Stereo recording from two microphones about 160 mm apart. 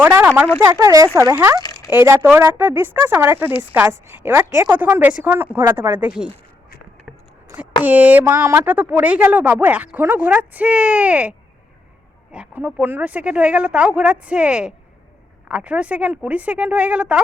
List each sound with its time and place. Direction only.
0.0 s speech: 10° right (ahead or behind)
7.9 s speech: 10° right (ahead or behind)